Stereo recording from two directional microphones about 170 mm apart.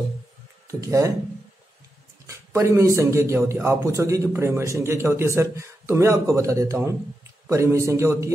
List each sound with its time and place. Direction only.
0.7 s speech: 20° right (ahead or behind)
2.2 s a man's voice: 15° right (ahead or behind)